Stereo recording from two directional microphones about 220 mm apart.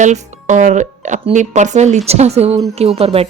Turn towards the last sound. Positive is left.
turn(degrees=-25)  # may be behind; listen again after turning